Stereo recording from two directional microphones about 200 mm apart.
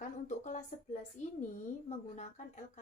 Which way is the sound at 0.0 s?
35° left (ahead or behind).